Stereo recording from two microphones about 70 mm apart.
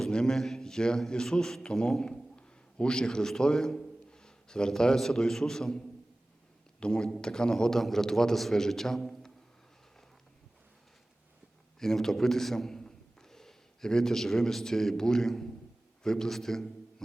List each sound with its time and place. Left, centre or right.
0.0 s a man's voice: centre
11.8 s a man's voice: centre